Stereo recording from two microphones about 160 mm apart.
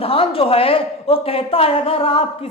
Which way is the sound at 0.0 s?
35° left (ahead or behind).